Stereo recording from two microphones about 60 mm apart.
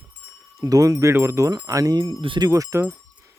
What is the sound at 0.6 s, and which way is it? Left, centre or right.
Speech, right.